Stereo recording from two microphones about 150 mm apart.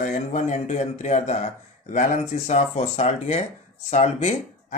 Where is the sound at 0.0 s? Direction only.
55° left (ahead or behind).